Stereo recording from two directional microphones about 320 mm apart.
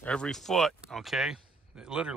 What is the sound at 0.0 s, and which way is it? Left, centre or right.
Speech, centre.